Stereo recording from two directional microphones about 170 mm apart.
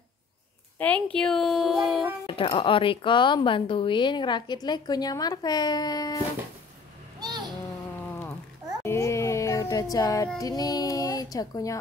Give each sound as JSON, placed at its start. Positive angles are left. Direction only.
{"t": 0.7, "sound": "a woman's voice", "side_deg": 10}
{"t": 2.2, "sound": "a woman's voice", "side_deg": 30}
{"t": 7.2, "sound": "a sound", "side_deg": -25}
{"t": 8.8, "sound": "child singing", "side_deg": 15}